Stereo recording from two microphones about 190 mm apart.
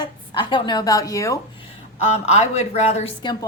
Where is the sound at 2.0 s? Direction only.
35° left (ahead or behind).